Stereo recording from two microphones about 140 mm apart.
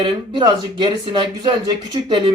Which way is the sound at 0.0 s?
35° right (ahead or behind).